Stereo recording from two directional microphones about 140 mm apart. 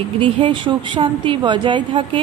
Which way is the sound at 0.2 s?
35° right (ahead or behind).